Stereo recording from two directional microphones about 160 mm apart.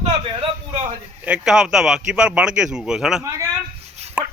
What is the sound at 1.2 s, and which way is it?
A man's voice, 5° right (ahead or behind).